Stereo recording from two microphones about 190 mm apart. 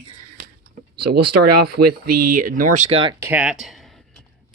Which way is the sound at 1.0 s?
60° right (ahead or behind).